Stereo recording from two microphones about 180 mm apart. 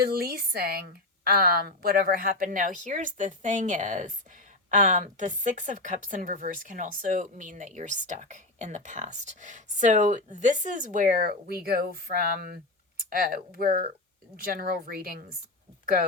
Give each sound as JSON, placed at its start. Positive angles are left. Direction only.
{"t": 0.0, "sound": "a woman's voice", "side_deg": -60}